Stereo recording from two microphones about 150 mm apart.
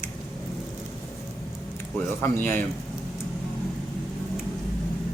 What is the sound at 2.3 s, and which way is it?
Speech, 60° right (ahead or behind).